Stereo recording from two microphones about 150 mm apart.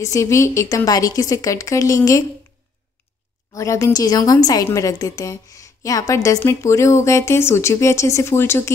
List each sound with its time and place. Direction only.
0.0 s a woman's voice: 20° left (ahead or behind)
3.5 s a woman's voice: 20° left (ahead or behind)